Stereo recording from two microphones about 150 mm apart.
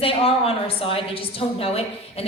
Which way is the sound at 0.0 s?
40° left (ahead or behind).